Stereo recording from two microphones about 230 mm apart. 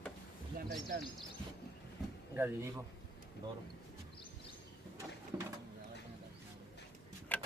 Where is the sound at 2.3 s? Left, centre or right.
Centre.